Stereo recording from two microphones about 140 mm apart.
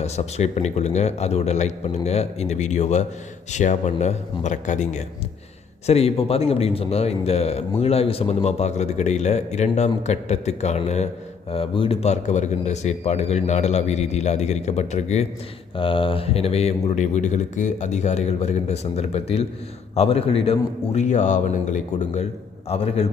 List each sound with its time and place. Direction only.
0.0 s a man's voice: 50° left (ahead or behind)
11.5 s a man's voice: 40° left (ahead or behind)
15.7 s a man's voice: 40° left (ahead or behind); by 22.3 s 55° left (ahead or behind)
22.7 s a man's voice: 45° left (ahead or behind)